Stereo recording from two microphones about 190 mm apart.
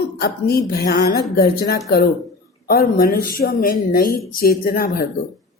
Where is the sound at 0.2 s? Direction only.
55° left (ahead or behind).